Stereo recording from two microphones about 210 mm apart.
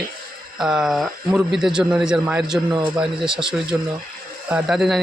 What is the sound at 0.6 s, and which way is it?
A man's voice, 5° right (ahead or behind).